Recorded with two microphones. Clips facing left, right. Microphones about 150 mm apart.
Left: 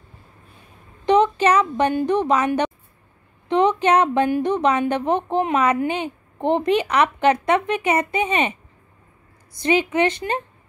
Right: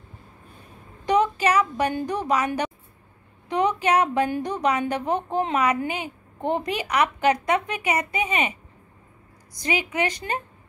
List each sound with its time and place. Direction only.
1.0 s a sound: 25° left (ahead or behind)
1.5 s speech: 25° left (ahead or behind)
9.6 s speech: 25° left (ahead or behind)